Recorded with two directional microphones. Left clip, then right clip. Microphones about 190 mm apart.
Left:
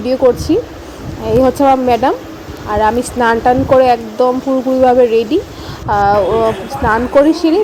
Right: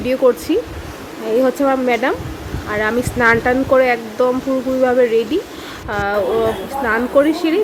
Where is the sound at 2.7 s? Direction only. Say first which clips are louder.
Left 5 dB; centre (ahead or behind).